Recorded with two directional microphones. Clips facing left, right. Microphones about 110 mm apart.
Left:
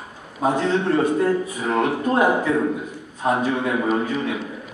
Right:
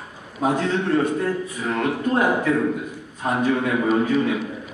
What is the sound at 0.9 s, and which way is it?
A man's voice, 20° left (ahead or behind).